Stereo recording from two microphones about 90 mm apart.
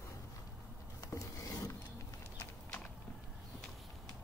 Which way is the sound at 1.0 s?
40° left (ahead or behind).